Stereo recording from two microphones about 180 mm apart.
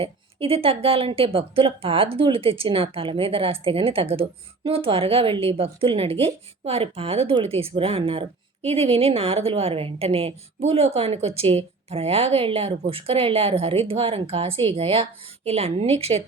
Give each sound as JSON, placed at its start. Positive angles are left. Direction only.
{"t": 0.0, "sound": "a woman's voice", "side_deg": -30}